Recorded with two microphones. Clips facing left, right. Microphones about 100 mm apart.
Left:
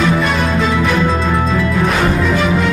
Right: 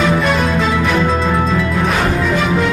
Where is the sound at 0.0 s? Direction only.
Centre (ahead or behind).